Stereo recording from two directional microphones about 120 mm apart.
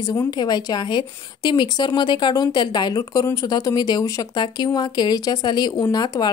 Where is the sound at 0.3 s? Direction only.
35° left (ahead or behind).